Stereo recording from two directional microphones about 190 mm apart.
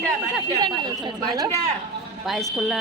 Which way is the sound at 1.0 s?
20° right (ahead or behind).